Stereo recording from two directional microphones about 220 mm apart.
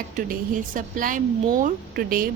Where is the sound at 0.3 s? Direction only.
35° right (ahead or behind).